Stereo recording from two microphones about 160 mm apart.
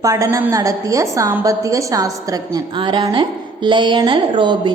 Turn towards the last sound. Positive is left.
turn(degrees=-30)  # may be behind; listen again after turning